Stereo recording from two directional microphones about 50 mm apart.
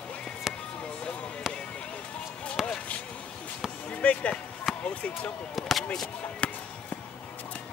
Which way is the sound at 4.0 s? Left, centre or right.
Left.